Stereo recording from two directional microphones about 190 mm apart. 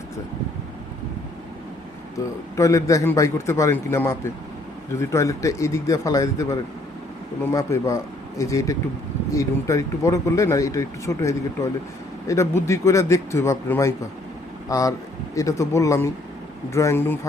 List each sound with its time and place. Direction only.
2.6 s speech: 15° left (ahead or behind)